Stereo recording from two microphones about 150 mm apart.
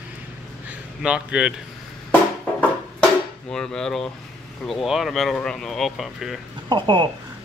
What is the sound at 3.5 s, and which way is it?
Speech, 5° left (ahead or behind).